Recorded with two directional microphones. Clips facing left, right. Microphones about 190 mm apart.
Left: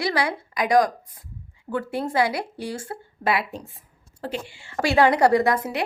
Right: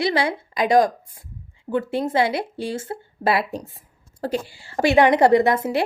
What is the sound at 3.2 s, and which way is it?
Speech, 40° right (ahead or behind).